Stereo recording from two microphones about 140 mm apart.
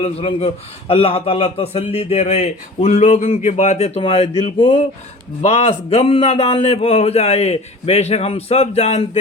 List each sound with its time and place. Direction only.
0.0 s a man's voice: 45° left (ahead or behind)
5.4 s a man's voice: 50° left (ahead or behind)